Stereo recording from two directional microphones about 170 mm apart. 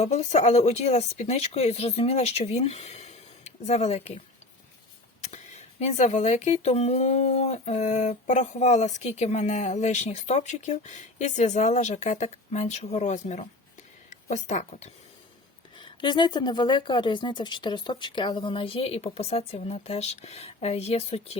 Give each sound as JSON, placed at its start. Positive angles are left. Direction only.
{"t": 0.0, "sound": "speech", "side_deg": 40}
{"t": 5.8, "sound": "speech", "side_deg": 40}
{"t": 15.8, "sound": "a woman's voice", "side_deg": 25}